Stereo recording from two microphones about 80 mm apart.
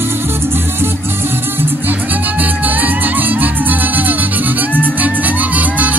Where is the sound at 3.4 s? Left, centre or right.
Right.